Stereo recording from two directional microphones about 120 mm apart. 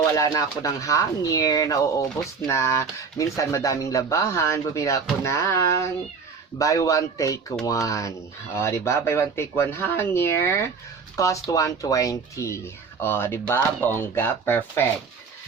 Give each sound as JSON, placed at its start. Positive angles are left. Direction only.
{"t": 0.0, "sound": "speech", "side_deg": 30}